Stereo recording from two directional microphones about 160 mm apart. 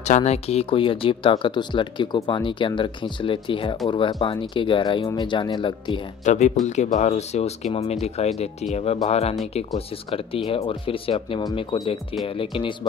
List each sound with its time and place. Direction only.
0.0 s speech: 45° left (ahead or behind)
6.2 s speech: 50° left (ahead or behind)